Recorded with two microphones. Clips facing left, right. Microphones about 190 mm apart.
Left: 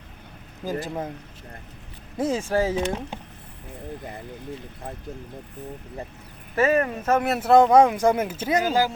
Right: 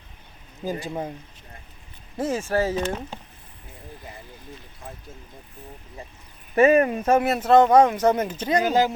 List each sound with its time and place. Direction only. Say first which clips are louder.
0.6 s speech: even; centre (ahead or behind)
2.1 s speech: left 1 dB; 10° left (ahead or behind)
6.6 s speech: right 4 dB; 20° right (ahead or behind)
7.3 s speech: left 2 dB; 10° left (ahead or behind)
8.6 s speech: right 3 dB; 20° right (ahead or behind)